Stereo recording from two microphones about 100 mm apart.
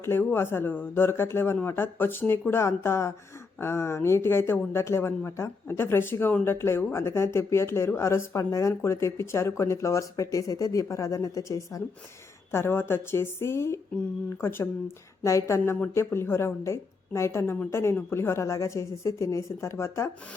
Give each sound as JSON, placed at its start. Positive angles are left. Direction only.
{"t": 0.0, "sound": "speech", "side_deg": 20}